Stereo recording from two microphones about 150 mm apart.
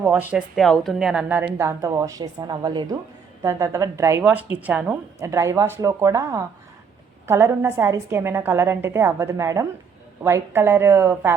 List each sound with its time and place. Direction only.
0.0 s a woman's voice: 10° right (ahead or behind)